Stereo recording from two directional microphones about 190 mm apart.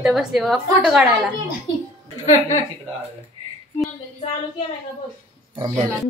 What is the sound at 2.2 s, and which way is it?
Speech, 40° left (ahead or behind).